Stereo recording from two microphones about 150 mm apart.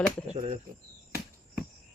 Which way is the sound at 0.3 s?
40° right (ahead or behind).